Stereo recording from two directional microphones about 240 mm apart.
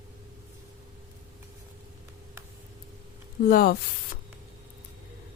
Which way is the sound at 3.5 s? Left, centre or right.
Left.